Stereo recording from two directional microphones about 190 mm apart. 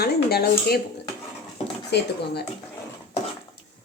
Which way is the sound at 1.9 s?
60° left (ahead or behind).